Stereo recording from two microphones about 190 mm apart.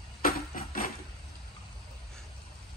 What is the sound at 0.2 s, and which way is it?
Music, 45° left (ahead or behind).